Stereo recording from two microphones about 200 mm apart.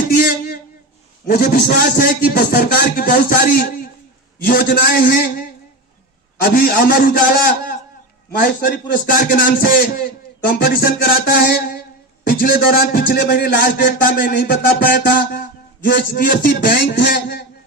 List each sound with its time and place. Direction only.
0.1 s a sound: 45° left (ahead or behind)
1.3 s a man's voice: 50° left (ahead or behind)
12.2 s a man's voice: 50° left (ahead or behind)
16.9 s a man's voice: 55° left (ahead or behind)